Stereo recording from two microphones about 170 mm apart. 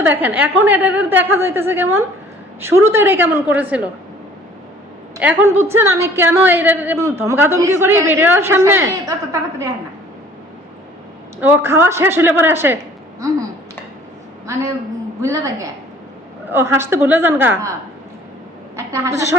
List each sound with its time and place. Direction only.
0.0 s a woman's voice: 10° right (ahead or behind)
5.7 s a woman's voice: 15° right (ahead or behind)
11.3 s a woman's voice: 10° right (ahead or behind)
15.2 s a woman's voice: 20° right (ahead or behind)
18.9 s a woman's voice: 20° right (ahead or behind)